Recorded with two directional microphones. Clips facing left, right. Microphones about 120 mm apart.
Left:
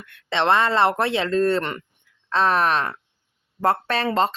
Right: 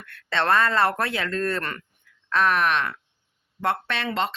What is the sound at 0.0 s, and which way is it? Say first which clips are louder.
Speech: left 3 dB; 20° left (ahead or behind).